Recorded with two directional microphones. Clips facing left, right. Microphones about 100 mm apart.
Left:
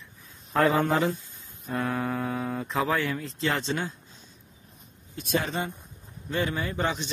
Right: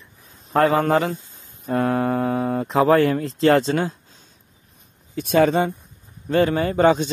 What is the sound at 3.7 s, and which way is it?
Speech, 85° right.